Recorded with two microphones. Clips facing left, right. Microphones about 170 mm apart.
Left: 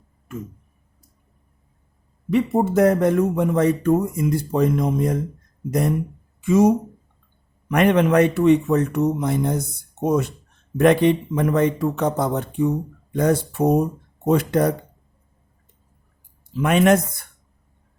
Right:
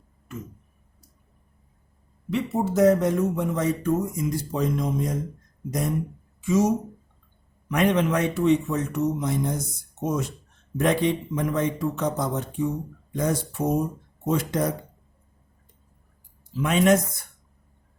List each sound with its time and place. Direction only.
2.3 s speech: 55° left (ahead or behind)
6.4 s speech: 55° left (ahead or behind)
16.6 s speech: 60° left (ahead or behind)